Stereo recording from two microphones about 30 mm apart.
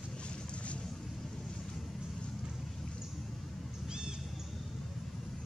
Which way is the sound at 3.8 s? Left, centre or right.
Right.